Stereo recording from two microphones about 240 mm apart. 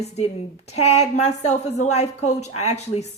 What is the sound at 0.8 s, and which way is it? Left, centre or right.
A woman's voice, left.